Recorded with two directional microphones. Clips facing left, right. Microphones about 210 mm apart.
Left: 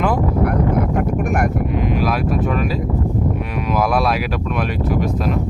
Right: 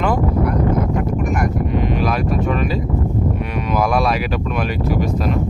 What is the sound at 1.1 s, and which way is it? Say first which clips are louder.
Speech: left 1 dB; 55° left (ahead or behind).